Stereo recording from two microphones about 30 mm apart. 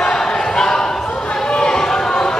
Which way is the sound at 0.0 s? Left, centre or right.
Left.